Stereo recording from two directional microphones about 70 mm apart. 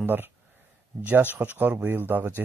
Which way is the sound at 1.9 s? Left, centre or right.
Right.